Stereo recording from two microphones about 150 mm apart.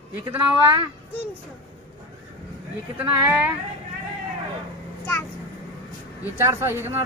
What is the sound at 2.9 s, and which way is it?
Speech, 10° right (ahead or behind).